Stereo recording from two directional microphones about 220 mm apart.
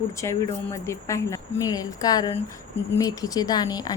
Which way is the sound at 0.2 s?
15° left (ahead or behind).